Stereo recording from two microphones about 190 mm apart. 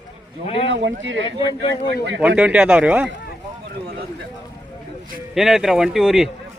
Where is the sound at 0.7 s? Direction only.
70° right (ahead or behind).